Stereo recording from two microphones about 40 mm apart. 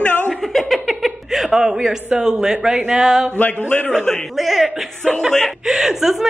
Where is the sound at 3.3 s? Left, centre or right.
Left.